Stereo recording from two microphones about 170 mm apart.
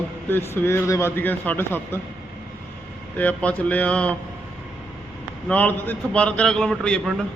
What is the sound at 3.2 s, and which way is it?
Speech, 10° left (ahead or behind).